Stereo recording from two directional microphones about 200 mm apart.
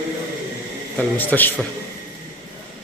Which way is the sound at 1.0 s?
10° left (ahead or behind).